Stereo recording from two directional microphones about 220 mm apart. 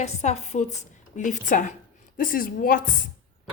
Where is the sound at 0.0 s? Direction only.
30° left (ahead or behind).